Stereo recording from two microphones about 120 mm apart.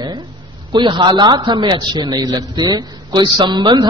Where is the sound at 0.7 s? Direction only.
40° right (ahead or behind).